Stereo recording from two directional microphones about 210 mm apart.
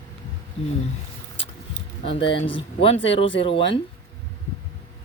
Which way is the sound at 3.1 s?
25° left (ahead or behind).